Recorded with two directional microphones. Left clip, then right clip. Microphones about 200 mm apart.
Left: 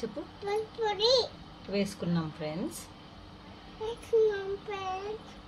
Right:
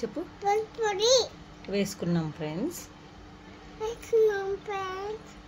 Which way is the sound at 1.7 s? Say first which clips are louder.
Right 3 dB; 20° right (ahead or behind).